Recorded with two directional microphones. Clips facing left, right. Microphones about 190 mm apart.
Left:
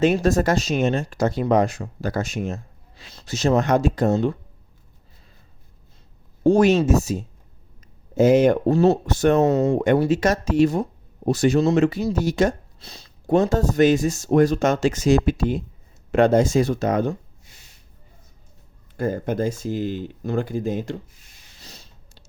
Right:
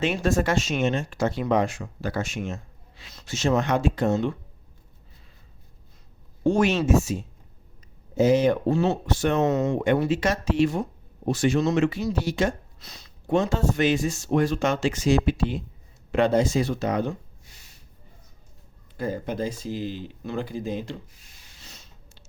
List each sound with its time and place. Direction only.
0.0 s speech: 40° left (ahead or behind)
6.4 s speech: 35° left (ahead or behind)
8.1 s speech: 50° left (ahead or behind)
12.8 s speech: 30° left (ahead or behind)
18.9 s speech: 50° left (ahead or behind)
21.6 s a sound: 35° left (ahead or behind)